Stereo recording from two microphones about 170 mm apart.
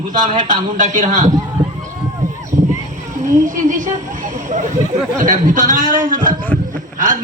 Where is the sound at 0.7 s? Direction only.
45° right (ahead or behind).